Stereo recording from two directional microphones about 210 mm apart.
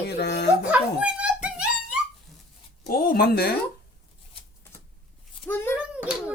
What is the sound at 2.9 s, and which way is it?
Speech, 45° left (ahead or behind).